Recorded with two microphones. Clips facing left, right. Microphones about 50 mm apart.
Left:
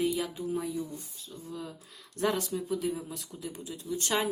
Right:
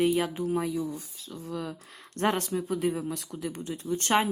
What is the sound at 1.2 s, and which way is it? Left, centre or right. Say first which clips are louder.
Speech: right 6 dB; right.